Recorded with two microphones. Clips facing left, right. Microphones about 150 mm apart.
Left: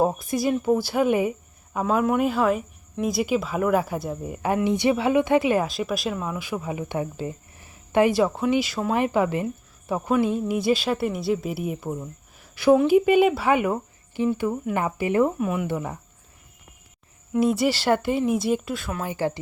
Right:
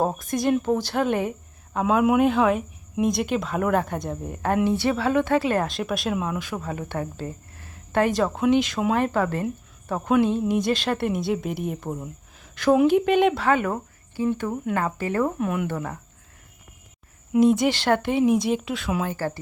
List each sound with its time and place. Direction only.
0.0 s speech: 10° left (ahead or behind)
4.6 s speech: 15° left (ahead or behind); by 6.4 s centre (ahead or behind)
6.4 s speech: 10° left (ahead or behind)
12.4 s a sound: 10° left (ahead or behind)
12.9 s speech: 5° left (ahead or behind)
15.4 s speech: 5° left (ahead or behind)
17.3 s speech: 5° left (ahead or behind)
19.0 s speech: 20° left (ahead or behind)